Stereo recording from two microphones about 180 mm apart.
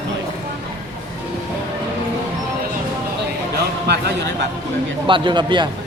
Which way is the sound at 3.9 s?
70° right (ahead or behind).